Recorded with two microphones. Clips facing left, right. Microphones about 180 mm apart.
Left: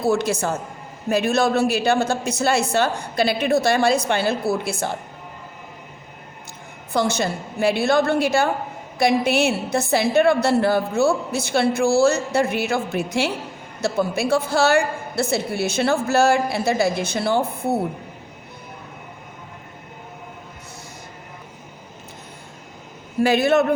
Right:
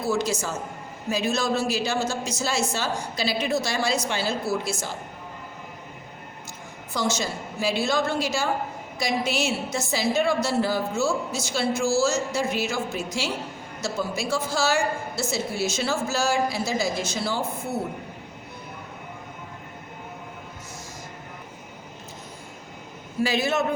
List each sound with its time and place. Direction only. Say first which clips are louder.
0.0 s a woman's voice: left 5 dB; 60° left (ahead or behind)
6.9 s a woman's voice: left 5 dB; 60° left (ahead or behind)
23.2 s a woman's voice: left 7 dB; 55° left (ahead or behind)